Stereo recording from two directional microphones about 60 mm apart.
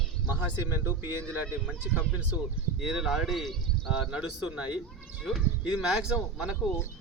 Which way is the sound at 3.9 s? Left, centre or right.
Centre.